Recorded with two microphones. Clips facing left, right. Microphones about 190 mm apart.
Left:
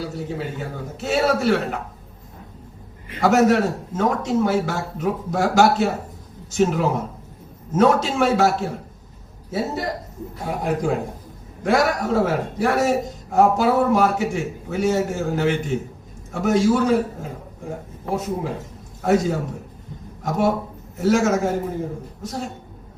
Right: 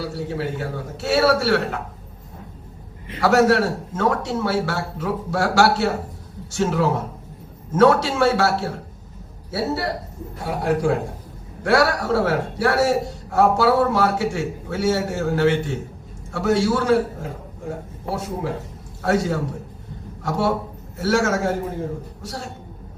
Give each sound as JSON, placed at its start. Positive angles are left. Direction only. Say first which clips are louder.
{"t": 0.0, "sound": "a man's voice", "louder": "right 2 dB", "side_deg": 20}
{"t": 3.2, "sound": "a man's voice", "louder": "even", "side_deg": 20}